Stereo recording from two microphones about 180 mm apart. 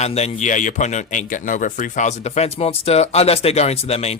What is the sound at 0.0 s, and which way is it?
Speech, 35° left (ahead or behind).